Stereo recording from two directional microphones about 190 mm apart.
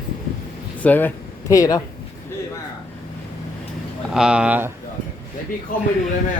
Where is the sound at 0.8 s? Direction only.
10° left (ahead or behind).